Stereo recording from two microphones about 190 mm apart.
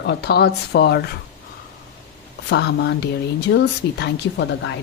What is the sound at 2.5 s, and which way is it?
Speech, 60° left (ahead or behind).